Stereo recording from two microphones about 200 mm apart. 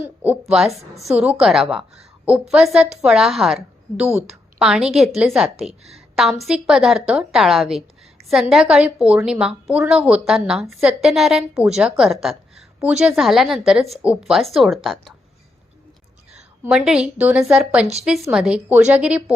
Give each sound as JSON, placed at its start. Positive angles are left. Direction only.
{"t": 0.0, "sound": "a woman's voice", "side_deg": -5}
{"t": 4.0, "sound": "a woman's voice", "side_deg": -30}
{"t": 4.6, "sound": "a woman's voice", "side_deg": -5}
{"t": 16.6, "sound": "a woman's voice", "side_deg": -5}